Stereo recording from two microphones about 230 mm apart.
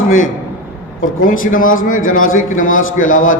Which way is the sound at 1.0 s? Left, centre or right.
Left.